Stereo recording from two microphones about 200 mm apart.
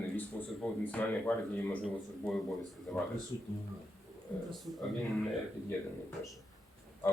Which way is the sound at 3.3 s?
25° left (ahead or behind).